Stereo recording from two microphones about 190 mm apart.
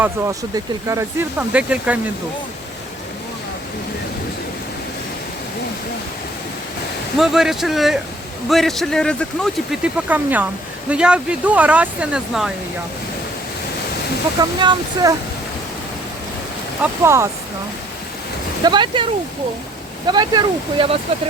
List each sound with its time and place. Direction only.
0.0 s speech: 15° right (ahead or behind)
7.2 s speech: centre (ahead or behind)
14.3 s speech: 20° right (ahead or behind)
16.8 s speech: 15° right (ahead or behind)
18.6 s speech: 25° right (ahead or behind)
20.1 s speech: 25° right (ahead or behind)